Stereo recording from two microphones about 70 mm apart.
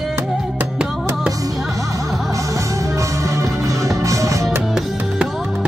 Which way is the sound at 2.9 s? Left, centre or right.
Right.